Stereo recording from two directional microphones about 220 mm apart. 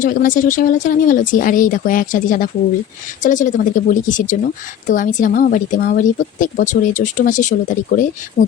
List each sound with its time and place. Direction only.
0.0 s speech: 35° left (ahead or behind)